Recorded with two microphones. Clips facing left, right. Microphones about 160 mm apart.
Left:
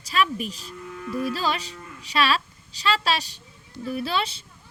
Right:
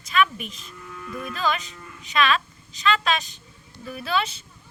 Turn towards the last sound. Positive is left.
turn(degrees=30)  # may be behind; listen again after turning